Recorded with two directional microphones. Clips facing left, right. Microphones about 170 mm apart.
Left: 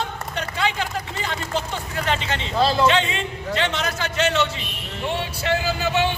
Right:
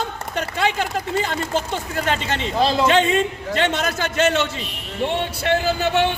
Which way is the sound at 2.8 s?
45° right (ahead or behind).